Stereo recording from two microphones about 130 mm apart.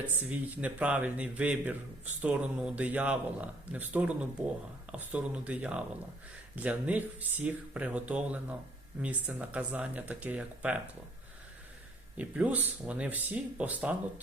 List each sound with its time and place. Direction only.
0.2 s a man's voice: 10° right (ahead or behind)
12.1 s a man's voice: 10° right (ahead or behind)